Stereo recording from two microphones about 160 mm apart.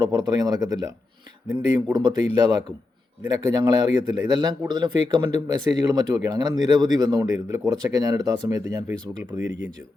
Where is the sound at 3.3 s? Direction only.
25° right (ahead or behind).